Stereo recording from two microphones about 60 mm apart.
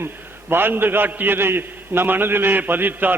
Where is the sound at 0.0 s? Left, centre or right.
Right.